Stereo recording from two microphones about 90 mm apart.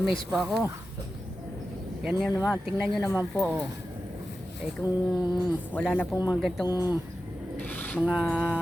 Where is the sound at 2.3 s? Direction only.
35° left (ahead or behind).